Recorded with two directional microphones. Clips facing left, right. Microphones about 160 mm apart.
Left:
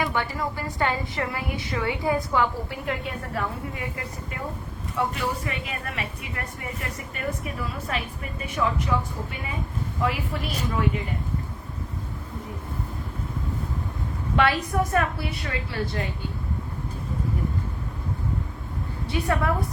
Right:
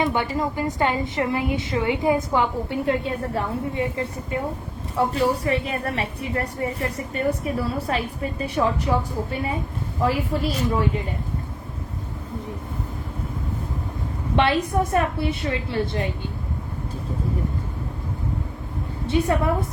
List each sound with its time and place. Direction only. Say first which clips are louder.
0.0 s a woman's voice: right 4 dB; 20° right (ahead or behind)
14.3 s a woman's voice: right 3 dB; 25° right (ahead or behind)
19.1 s a woman's voice: right 7 dB; 25° right (ahead or behind)